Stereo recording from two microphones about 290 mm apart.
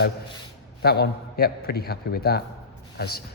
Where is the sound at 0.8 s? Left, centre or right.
Left.